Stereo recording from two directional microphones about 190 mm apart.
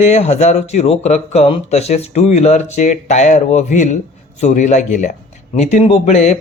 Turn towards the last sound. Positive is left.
turn(degrees=35)  # may be behind; listen again after turning